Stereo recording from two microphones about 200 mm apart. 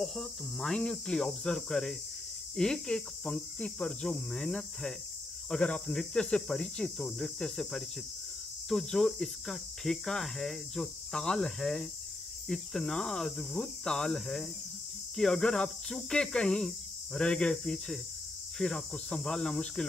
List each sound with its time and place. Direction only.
0.0 s cricket: 5° left (ahead or behind)